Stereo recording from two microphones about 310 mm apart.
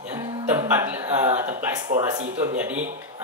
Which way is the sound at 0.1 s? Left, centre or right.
Centre.